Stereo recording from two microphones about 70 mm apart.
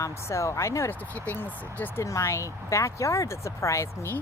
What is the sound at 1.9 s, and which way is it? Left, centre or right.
Speech, left.